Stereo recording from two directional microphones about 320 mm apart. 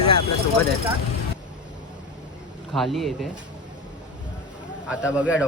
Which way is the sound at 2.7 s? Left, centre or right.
Centre.